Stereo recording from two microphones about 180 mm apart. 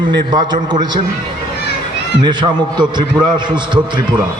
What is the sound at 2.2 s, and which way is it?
A man's voice, 25° right (ahead or behind).